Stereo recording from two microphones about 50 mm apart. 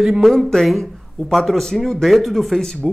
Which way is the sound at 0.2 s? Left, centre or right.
Centre.